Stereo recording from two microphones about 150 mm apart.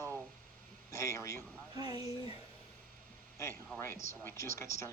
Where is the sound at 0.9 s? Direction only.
20° left (ahead or behind).